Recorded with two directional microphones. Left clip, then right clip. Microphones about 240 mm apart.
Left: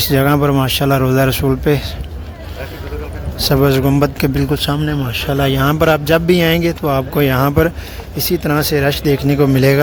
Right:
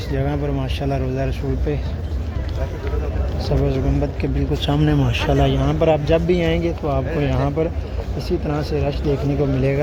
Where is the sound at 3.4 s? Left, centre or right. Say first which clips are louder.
Left 10 dB; left.